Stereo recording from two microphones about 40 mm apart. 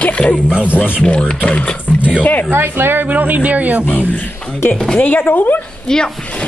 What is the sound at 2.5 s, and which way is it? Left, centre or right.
Speech, right.